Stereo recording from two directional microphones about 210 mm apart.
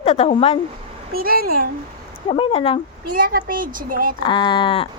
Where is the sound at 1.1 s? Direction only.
45° right (ahead or behind).